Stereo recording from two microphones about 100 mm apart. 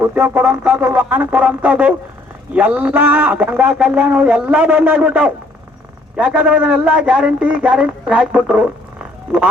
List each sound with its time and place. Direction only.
0.0 s a man's voice: 20° right (ahead or behind)